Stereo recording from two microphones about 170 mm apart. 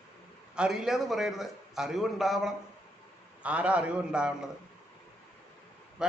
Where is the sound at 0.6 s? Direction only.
5° right (ahead or behind).